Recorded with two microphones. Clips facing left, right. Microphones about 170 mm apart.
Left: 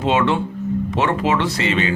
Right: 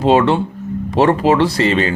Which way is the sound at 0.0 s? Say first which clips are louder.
Right 5 dB; 35° right (ahead or behind).